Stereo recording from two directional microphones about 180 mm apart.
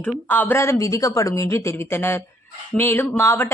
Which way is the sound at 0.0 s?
10° left (ahead or behind).